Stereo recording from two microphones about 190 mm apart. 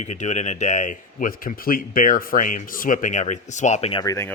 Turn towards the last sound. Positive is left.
turn(degrees=15)  # may be behind; listen again after turning